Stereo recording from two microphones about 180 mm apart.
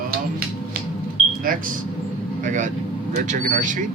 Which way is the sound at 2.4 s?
45° right (ahead or behind).